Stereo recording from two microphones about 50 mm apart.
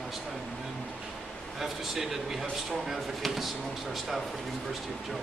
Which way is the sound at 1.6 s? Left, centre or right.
Centre.